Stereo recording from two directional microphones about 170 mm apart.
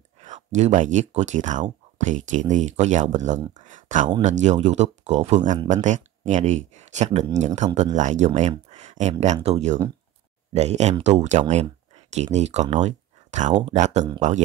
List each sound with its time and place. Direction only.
0.2 s speech: 45° right (ahead or behind)